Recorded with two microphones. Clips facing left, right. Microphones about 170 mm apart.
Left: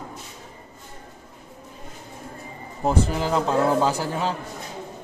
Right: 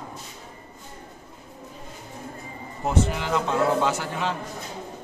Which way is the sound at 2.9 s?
35° left (ahead or behind).